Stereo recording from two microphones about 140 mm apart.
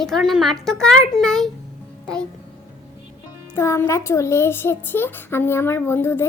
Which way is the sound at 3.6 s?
20° left (ahead or behind).